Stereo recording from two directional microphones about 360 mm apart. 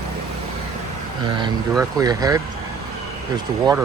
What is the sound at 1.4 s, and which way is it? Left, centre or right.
Speech, centre.